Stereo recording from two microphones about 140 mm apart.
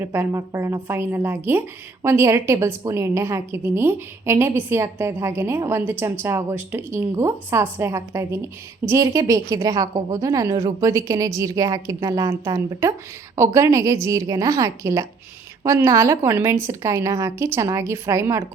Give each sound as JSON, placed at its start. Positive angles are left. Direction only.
{"t": 0.0, "sound": "a woman's voice", "side_deg": -20}